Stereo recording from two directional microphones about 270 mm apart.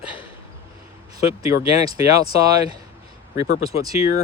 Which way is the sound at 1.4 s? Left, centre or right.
Centre.